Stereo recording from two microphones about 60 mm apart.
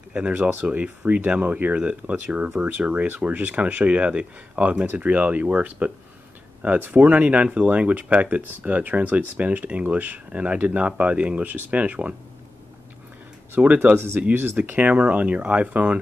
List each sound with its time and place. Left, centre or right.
0.3 s speech: right
0.7 s speech: right
13.6 s speech: right
13.9 s speech: right
14.6 s speech: right